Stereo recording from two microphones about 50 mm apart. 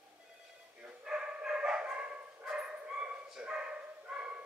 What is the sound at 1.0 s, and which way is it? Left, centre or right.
Dog, centre.